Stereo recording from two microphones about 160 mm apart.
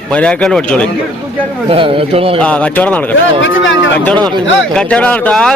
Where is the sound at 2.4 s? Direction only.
10° left (ahead or behind).